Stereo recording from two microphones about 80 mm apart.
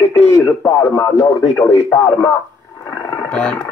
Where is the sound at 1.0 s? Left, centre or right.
Left.